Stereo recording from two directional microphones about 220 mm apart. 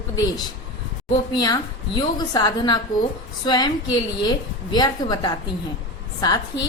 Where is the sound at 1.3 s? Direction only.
20° left (ahead or behind).